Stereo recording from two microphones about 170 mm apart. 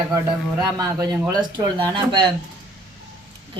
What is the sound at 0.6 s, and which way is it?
A woman's voice, 20° right (ahead or behind).